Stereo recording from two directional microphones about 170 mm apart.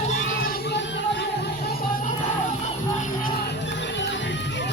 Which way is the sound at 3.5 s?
90° left.